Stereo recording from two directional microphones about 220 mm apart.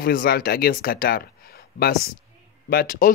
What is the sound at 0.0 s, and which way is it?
Speech, 45° left (ahead or behind).